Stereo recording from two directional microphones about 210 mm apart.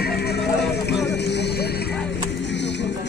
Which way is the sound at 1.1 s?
55° left (ahead or behind).